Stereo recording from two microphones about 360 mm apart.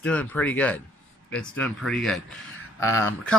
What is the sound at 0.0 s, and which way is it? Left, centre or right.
Speech, centre.